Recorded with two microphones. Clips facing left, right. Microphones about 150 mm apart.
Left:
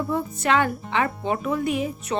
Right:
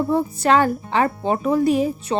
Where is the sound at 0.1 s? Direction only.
35° right (ahead or behind).